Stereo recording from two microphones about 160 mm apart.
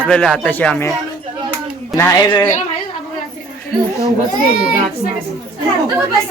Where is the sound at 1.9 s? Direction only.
20° left (ahead or behind).